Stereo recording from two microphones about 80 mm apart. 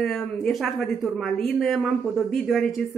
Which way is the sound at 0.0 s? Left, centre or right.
Centre.